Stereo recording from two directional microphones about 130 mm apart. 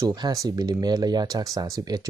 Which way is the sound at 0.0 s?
30° right (ahead or behind).